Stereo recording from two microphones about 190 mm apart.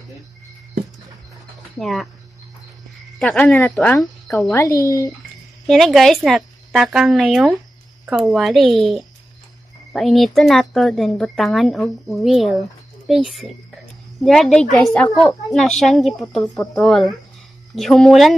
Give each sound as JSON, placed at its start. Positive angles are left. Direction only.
{"t": 1.8, "sound": "a woman's voice", "side_deg": 0}
{"t": 3.2, "sound": "speech", "side_deg": 5}
{"t": 5.7, "sound": "a woman's voice", "side_deg": 0}